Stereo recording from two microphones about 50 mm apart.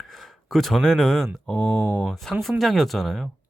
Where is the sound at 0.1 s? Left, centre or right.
Centre.